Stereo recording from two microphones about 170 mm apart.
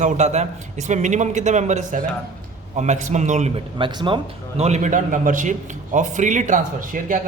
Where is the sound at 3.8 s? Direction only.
30° right (ahead or behind).